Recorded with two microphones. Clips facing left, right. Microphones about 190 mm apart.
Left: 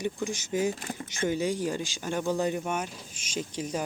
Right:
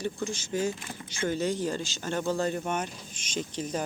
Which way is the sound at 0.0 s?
15° left (ahead or behind).